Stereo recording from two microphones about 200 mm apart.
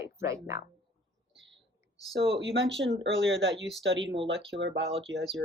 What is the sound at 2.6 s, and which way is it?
Speech, 60° right (ahead or behind).